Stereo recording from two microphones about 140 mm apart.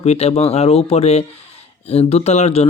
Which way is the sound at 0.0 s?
50° left (ahead or behind).